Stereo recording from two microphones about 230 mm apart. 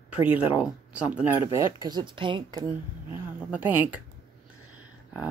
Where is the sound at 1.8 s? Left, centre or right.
Centre.